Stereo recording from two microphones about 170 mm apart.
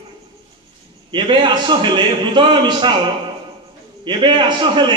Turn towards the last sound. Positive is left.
turn(degrees=-25)  # may be behind; listen again after turning